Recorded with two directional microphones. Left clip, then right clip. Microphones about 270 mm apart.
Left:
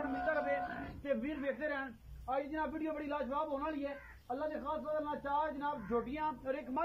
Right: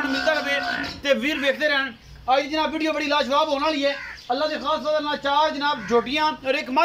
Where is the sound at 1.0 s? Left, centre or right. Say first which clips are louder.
Right 16 dB; centre.